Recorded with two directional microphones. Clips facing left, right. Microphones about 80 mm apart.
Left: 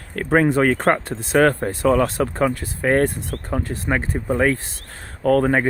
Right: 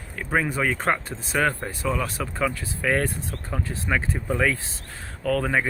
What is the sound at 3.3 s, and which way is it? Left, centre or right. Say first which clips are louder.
Speech: left 7 dB; left.